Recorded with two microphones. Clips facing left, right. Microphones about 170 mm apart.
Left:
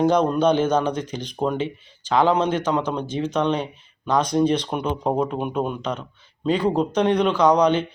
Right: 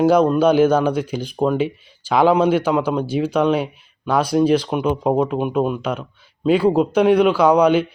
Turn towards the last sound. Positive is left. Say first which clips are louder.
# right 3 dB
turn(degrees=-10)  # may be behind; listen again after turning